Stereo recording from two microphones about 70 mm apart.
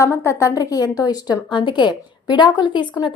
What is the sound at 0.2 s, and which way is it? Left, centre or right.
A woman's voice, left.